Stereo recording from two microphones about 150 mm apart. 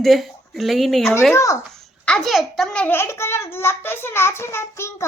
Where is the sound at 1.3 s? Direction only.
20° left (ahead or behind).